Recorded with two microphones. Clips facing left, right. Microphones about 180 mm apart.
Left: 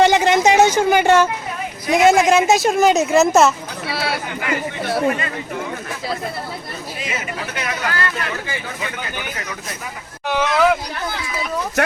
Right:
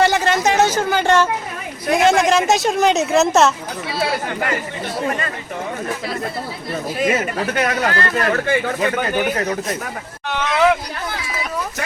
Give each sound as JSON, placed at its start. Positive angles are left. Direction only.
{"t": 0.0, "sound": "a sound", "side_deg": 15}
{"t": 1.9, "sound": "speech", "side_deg": 5}
{"t": 3.8, "sound": "chatter", "side_deg": 70}
{"t": 7.0, "sound": "speech", "side_deg": -50}
{"t": 7.9, "sound": "speech", "side_deg": -35}
{"t": 10.3, "sound": "speech", "side_deg": 5}